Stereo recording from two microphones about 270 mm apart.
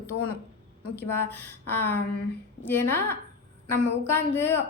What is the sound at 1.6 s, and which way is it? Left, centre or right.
Speech, left.